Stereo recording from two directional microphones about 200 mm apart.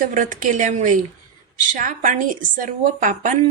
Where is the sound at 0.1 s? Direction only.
40° right (ahead or behind).